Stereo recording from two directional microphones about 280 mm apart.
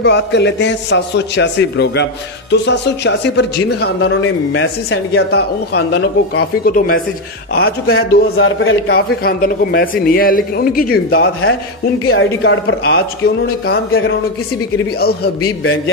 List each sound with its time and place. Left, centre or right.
0.0 s a man's voice: left
7.5 s a man's voice: left